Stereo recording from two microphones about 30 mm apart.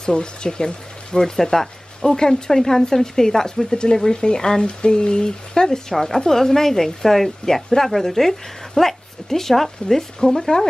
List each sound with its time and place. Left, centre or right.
0.0 s speech: left
3.7 s speech: left